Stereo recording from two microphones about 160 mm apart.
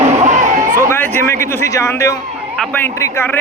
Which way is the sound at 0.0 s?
45° right (ahead or behind).